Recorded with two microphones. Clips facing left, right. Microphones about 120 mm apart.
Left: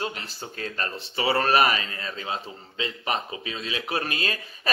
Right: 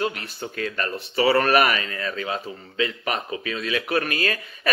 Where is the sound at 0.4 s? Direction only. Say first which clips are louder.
Right 5 dB; 30° left (ahead or behind).